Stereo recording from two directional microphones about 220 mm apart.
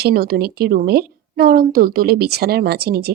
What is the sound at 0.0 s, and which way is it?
Speech, 45° right (ahead or behind).